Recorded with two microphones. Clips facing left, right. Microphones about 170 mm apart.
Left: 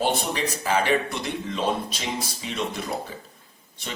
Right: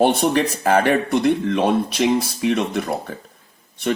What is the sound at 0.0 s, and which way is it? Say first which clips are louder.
Speech: right 8 dB; 60° right (ahead or behind).